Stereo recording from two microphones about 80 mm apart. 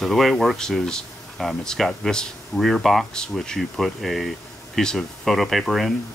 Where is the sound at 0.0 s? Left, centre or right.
Centre.